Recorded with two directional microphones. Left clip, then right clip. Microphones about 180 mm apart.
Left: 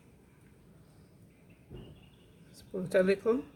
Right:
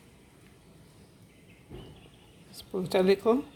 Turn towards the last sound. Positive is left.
turn(degrees=-5)  # may be behind; listen again after turning